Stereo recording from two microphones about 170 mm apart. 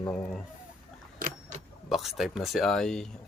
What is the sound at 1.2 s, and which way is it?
Vehicle, 55° right (ahead or behind).